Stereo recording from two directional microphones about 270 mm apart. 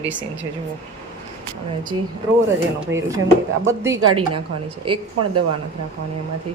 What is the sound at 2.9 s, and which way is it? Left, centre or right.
Speech, right.